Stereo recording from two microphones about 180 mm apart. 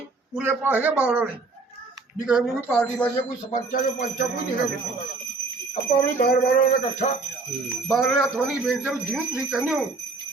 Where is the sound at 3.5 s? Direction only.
45° left (ahead or behind).